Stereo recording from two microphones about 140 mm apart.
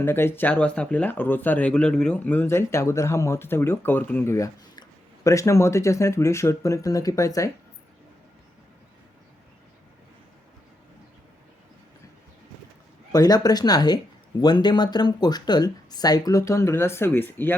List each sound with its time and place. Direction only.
0.0 s speech: 15° left (ahead or behind)
13.1 s speech: 25° left (ahead or behind)